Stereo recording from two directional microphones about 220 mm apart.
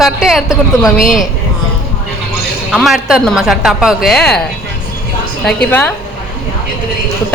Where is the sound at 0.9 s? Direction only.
40° left (ahead or behind).